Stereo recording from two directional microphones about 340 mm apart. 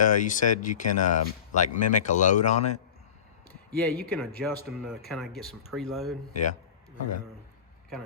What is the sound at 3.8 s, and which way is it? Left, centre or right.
Speech, centre.